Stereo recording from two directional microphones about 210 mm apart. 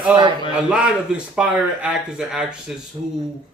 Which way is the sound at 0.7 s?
5° right (ahead or behind).